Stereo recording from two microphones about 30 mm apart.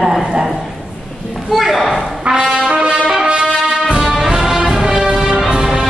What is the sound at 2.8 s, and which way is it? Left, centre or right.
Music, right.